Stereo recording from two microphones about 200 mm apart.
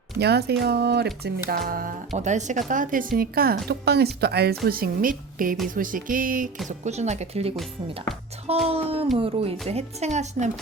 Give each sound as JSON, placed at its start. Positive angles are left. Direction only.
{"t": 0.2, "sound": "a woman's voice", "side_deg": -55}
{"t": 8.6, "sound": "music", "side_deg": -30}
{"t": 9.1, "sound": "speech", "side_deg": -30}